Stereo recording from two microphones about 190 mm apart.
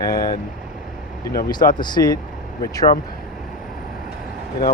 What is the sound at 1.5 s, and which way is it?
Speech, 20° left (ahead or behind).